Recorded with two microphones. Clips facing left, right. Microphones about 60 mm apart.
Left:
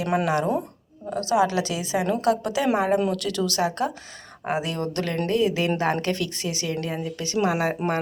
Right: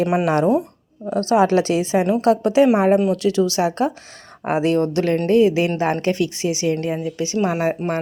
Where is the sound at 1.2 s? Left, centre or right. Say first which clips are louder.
Right 6 dB; right.